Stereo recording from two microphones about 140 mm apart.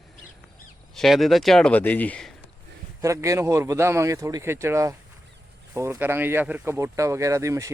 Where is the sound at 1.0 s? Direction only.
Centre (ahead or behind).